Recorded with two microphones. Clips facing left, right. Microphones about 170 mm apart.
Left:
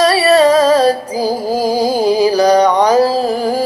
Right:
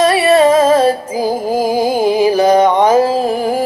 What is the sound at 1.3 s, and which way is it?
Music, 20° right (ahead or behind).